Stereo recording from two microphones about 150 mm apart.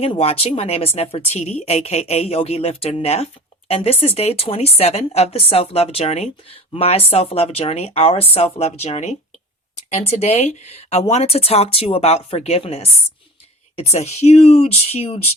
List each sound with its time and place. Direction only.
0.0 s speech: 40° left (ahead or behind)